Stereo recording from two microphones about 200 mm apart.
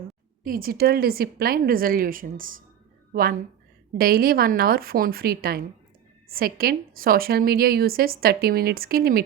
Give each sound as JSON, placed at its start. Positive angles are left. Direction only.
{"t": 0.4, "sound": "a woman's voice", "side_deg": -45}